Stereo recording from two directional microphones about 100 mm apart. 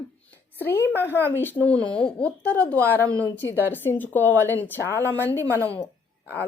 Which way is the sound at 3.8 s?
20° left (ahead or behind).